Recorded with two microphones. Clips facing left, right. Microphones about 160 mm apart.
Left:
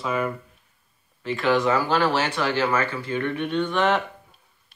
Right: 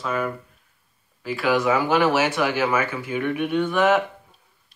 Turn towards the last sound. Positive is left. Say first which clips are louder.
# right 3 dB
turn(degrees=-10)  # may be behind; listen again after turning